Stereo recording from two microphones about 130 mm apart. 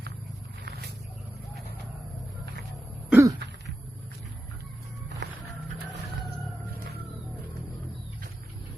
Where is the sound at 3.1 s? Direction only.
25° right (ahead or behind).